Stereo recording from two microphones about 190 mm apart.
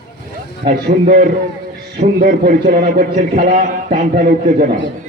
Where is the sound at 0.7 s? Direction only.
45° right (ahead or behind).